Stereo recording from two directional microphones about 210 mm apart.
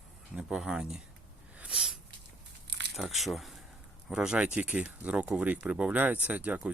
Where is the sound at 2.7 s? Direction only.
55° right (ahead or behind).